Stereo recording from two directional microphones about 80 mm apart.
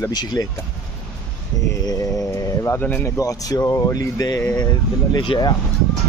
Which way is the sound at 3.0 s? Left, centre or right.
Left.